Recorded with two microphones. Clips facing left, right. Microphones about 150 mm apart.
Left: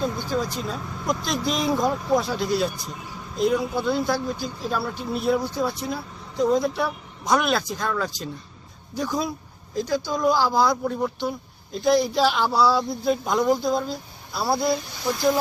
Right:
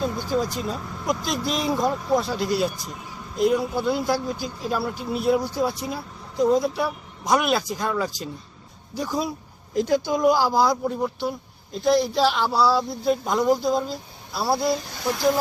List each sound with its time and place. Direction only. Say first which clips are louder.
0.0 s speech: right 1 dB; 5° right (ahead or behind)
10.1 s speech: right 2 dB; 20° right (ahead or behind)
10.3 s speech: even; 5° right (ahead or behind)